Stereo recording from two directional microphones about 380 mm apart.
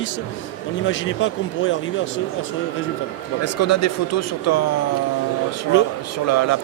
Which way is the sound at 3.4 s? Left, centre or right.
Left.